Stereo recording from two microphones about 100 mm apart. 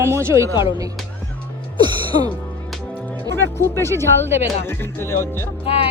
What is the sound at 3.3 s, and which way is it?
Speech, 25° left (ahead or behind).